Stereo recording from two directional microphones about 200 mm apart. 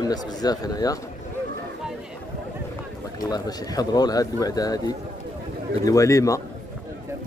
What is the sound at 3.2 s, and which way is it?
A man's voice, 20° left (ahead or behind).